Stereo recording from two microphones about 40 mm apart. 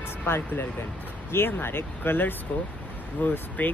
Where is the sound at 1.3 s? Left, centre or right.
Left.